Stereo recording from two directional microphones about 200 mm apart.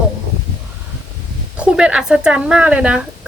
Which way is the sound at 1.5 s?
5° right (ahead or behind).